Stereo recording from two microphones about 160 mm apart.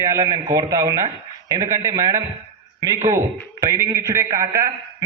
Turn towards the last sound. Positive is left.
turn(degrees=-20)  # may be behind; listen again after turning